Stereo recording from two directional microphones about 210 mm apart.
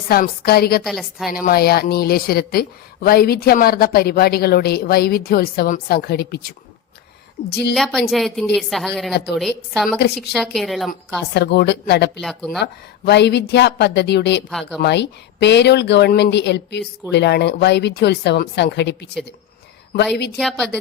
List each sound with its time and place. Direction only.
0.1 s a woman's voice: 45° left (ahead or behind)
0.9 s a woman's voice: centre (ahead or behind)
1.3 s a woman's voice: 45° left (ahead or behind)
7.7 s a woman's voice: centre (ahead or behind)
11.3 s a woman's voice: 55° left (ahead or behind)
12.2 s a woman's voice: centre (ahead or behind)
13.1 s a woman's voice: 55° left (ahead or behind)
20.4 s a woman's voice: centre (ahead or behind)